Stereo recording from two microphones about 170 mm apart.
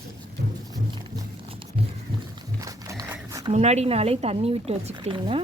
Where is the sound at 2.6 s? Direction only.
20° right (ahead or behind).